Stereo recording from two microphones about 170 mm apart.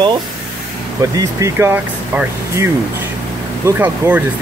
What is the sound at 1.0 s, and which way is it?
Speech, 20° right (ahead or behind).